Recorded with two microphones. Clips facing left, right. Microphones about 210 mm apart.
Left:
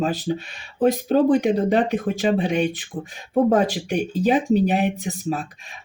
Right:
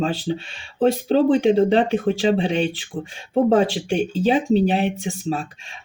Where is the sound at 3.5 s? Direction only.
25° right (ahead or behind).